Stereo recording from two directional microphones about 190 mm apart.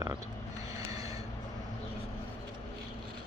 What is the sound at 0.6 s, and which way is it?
Vehicle, 20° right (ahead or behind).